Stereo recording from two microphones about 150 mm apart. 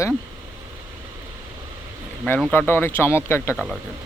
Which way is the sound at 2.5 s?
15° left (ahead or behind).